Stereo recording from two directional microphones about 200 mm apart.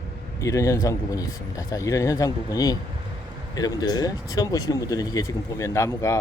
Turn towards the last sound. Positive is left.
turn(degrees=15)  # may be behind; listen again after turning